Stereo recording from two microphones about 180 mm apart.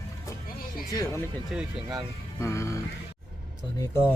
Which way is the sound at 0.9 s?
20° left (ahead or behind).